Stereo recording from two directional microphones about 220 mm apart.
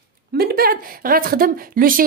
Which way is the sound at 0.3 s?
45° right (ahead or behind).